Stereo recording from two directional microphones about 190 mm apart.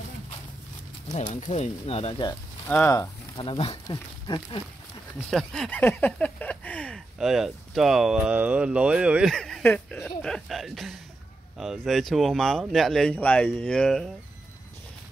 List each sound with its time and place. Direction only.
1.1 s speech: 40° left (ahead or behind)
2.7 s speech: 15° left (ahead or behind)
3.4 s speech: 30° left (ahead or behind)
5.3 s speech: centre (ahead or behind)